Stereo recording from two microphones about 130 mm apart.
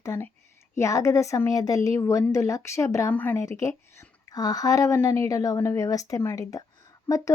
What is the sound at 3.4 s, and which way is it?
A woman's voice, 25° left (ahead or behind).